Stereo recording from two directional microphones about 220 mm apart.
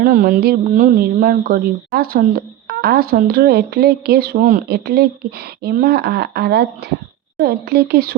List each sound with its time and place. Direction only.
0.0 s speech: 40° right (ahead or behind)